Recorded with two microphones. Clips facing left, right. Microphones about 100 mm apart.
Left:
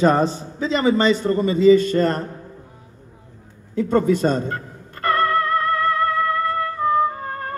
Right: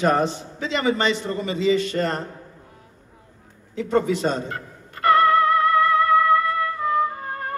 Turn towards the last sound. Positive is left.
turn(degrees=35)  # may be behind; listen again after turning